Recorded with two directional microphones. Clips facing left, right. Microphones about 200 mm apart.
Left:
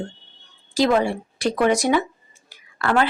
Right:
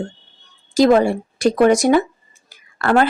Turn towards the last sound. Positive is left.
turn(degrees=-45)  # may be behind; listen again after turning